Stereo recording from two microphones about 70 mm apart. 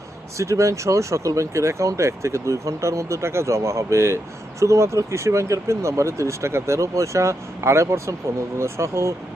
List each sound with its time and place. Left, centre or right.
0.3 s speech: right